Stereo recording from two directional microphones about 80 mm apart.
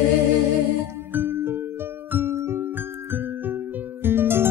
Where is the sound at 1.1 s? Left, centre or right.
Right.